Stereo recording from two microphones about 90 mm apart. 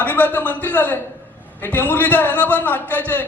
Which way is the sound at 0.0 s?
20° left (ahead or behind).